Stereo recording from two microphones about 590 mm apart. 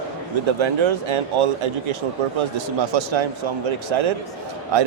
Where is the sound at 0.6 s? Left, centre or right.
Right.